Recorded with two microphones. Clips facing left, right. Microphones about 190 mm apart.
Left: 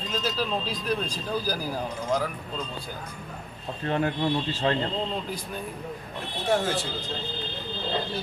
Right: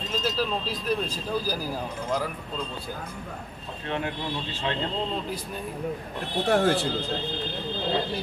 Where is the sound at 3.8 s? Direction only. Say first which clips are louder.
Left 5 dB; 40° left (ahead or behind).